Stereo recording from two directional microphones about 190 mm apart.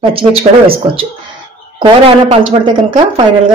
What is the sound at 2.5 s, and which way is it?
Speech, 25° right (ahead or behind).